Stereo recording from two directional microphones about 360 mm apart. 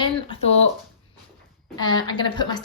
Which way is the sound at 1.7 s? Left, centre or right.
Centre.